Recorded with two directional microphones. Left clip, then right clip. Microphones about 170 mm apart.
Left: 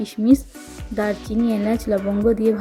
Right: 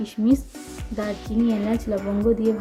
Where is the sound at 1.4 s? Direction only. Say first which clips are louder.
Left 3 dB; 35° left (ahead or behind).